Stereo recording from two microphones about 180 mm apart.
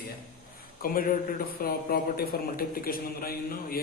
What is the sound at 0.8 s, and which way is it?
A man's voice, 55° left (ahead or behind).